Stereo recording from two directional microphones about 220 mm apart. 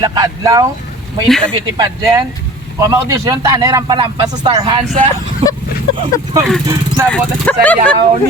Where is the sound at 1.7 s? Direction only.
20° right (ahead or behind).